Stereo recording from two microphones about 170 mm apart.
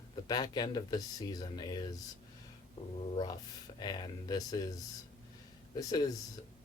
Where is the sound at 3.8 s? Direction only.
25° left (ahead or behind).